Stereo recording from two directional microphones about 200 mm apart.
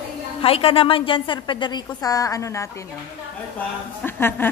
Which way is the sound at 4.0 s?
10° left (ahead or behind).